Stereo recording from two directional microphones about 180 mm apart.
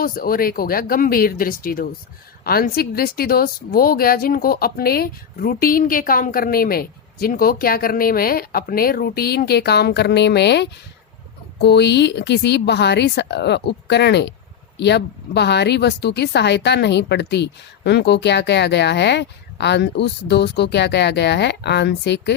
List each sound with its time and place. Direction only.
0.0 s a woman's voice: 55° left (ahead or behind); by 22.4 s 70° left (ahead or behind)